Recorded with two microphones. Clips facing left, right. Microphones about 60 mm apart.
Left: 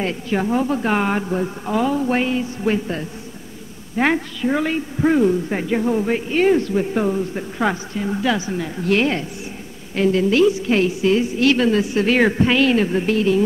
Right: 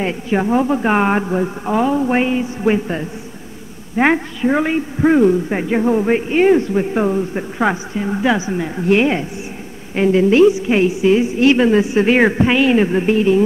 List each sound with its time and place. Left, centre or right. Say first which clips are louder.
0.0 s a man's voice: right 3 dB; centre